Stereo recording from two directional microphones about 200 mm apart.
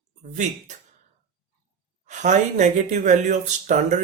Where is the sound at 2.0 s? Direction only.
35° right (ahead or behind).